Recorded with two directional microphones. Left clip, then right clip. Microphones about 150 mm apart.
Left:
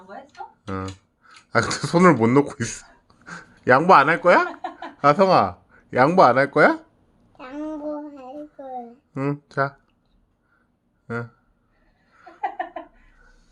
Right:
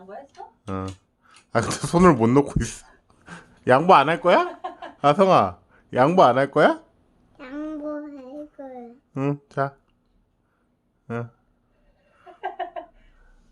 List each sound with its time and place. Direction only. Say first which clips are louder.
0.7 s speech: even; 20° right (ahead or behind)
7.3 s child singing: left 1 dB; 10° right (ahead or behind)
9.1 s speech: left 1 dB; 20° right (ahead or behind)
11.0 s a sound: left 1 dB; 10° right (ahead or behind)